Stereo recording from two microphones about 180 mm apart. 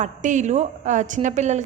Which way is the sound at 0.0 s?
45° right (ahead or behind).